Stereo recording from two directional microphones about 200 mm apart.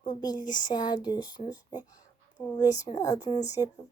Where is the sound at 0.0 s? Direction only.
20° left (ahead or behind).